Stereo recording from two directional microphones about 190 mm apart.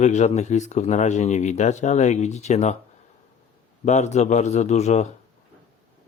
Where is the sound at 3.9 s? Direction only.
40° left (ahead or behind).